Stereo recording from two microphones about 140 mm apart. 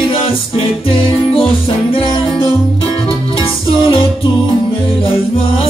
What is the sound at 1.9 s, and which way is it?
Music, 40° left (ahead or behind).